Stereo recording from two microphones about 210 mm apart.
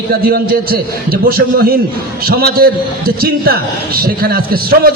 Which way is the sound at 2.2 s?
45° right (ahead or behind).